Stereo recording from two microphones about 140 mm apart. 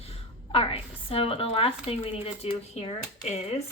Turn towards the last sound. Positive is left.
turn(degrees=50)  # may be behind; listen again after turning